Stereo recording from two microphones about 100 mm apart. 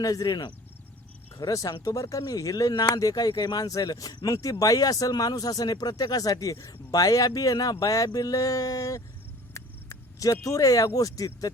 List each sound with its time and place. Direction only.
0.0 s speech: 35° left (ahead or behind)